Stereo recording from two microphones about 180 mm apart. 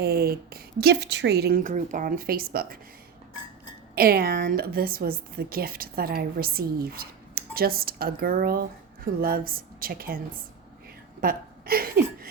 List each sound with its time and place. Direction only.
0.0 s a woman's voice: 60° right (ahead or behind)
3.9 s a woman's voice: 55° right (ahead or behind)
11.2 s speech: 55° right (ahead or behind)